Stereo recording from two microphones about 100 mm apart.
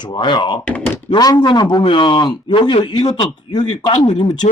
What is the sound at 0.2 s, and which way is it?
Speech, 50° left (ahead or behind).